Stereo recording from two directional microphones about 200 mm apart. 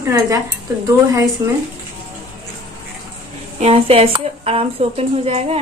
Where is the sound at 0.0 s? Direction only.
15° right (ahead or behind).